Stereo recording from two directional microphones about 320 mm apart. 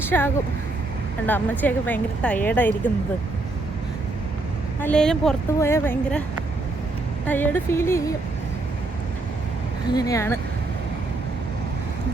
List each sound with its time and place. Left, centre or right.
0.0 s speech: centre
1.3 s speech: centre
4.8 s speech: centre
7.3 s speech: centre
9.9 s speech: centre